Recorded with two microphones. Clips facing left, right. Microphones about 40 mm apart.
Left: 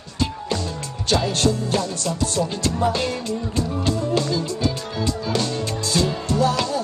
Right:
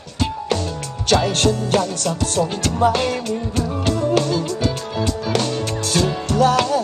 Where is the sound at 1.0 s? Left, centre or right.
Right.